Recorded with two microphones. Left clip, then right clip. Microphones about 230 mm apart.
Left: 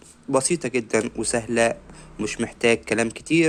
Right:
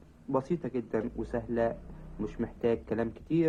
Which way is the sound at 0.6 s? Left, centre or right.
Left.